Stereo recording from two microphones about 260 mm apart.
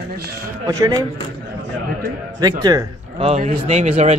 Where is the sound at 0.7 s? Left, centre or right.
Centre.